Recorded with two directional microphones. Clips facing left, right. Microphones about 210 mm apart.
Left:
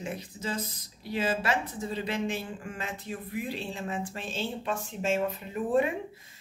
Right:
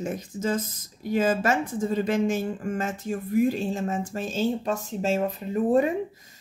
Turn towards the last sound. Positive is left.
turn(degrees=-40)  # may be behind; listen again after turning